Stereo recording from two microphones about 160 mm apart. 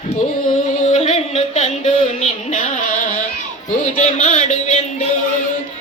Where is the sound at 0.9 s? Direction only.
40° left (ahead or behind).